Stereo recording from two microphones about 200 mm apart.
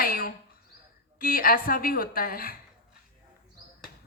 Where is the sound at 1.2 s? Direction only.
45° left (ahead or behind).